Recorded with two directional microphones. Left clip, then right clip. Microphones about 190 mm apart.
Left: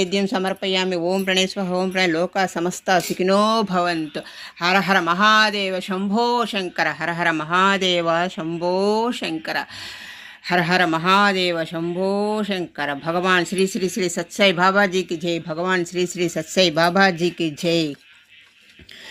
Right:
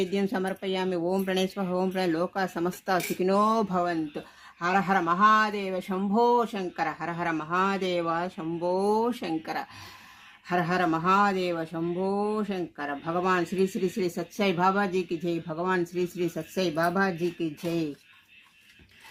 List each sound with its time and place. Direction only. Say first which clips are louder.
0.0 s speech: left 7 dB; 10° left (ahead or behind)